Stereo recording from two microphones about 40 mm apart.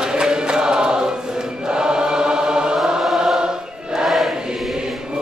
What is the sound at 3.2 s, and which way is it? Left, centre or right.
Choir, centre.